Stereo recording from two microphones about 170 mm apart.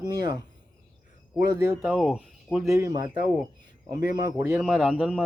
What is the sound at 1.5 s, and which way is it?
Speech, 15° right (ahead or behind).